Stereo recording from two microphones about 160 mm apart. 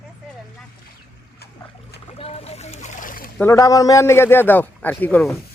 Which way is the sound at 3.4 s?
20° left (ahead or behind).